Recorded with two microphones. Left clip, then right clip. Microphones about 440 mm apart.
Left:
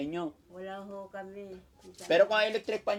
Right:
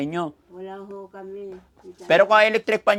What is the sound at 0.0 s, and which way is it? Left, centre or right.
Speech, right.